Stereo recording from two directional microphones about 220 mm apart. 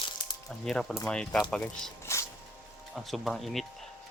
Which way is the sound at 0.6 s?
Centre (ahead or behind).